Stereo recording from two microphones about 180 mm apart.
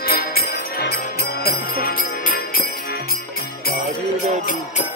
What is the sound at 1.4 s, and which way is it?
Jingle bell, 55° left (ahead or behind).